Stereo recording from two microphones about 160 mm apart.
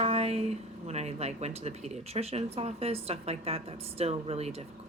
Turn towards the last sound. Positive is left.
turn(degrees=-40)  # may be behind; listen again after turning